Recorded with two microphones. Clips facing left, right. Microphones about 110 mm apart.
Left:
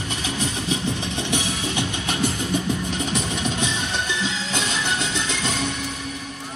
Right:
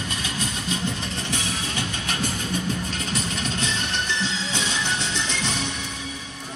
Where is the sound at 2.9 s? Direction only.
15° left (ahead or behind).